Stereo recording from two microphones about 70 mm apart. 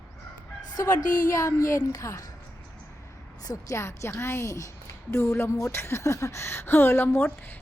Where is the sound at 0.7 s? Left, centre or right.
Left.